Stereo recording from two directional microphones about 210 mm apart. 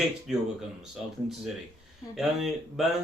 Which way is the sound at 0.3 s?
Centre (ahead or behind).